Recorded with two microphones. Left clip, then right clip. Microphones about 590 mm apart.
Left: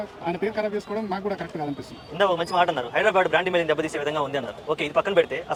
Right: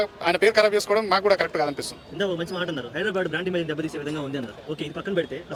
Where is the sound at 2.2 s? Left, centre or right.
Left.